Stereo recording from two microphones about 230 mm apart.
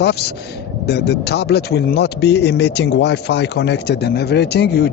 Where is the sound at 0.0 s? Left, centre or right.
Left.